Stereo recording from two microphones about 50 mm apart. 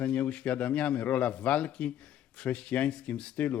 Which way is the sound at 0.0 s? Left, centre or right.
Left.